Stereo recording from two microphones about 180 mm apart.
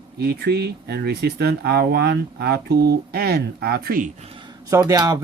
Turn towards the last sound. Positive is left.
turn(degrees=-20)  # may be behind; listen again after turning